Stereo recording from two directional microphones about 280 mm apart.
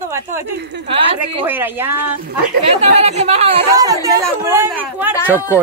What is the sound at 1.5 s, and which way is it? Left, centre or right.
Speech, centre.